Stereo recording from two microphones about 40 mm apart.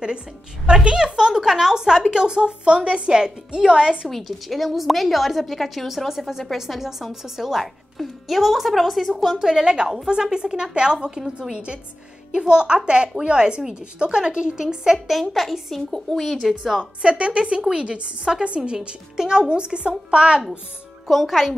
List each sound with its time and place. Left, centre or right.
0.8 s a woman's voice: right
1.1 s a woman's voice: centre
4.1 s speech: centre
5.9 s a woman's voice: centre
11.5 s a woman's voice: right
15.0 s a woman's voice: centre
17.0 s a woman's voice: right
21.1 s speech: centre